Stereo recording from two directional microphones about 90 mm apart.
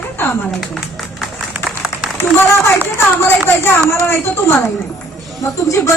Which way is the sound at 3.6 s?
25° left (ahead or behind).